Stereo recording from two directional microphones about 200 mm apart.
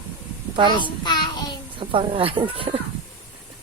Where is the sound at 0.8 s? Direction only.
20° left (ahead or behind).